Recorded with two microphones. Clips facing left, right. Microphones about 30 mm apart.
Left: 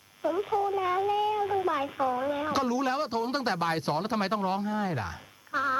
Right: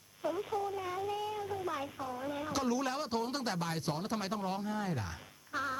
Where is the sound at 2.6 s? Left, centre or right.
Centre.